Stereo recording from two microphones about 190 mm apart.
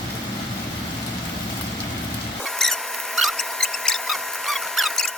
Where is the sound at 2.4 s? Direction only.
Centre (ahead or behind).